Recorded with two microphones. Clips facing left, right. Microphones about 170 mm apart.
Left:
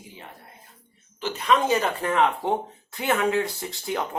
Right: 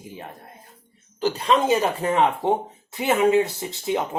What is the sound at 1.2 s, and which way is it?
Speech, 35° right (ahead or behind).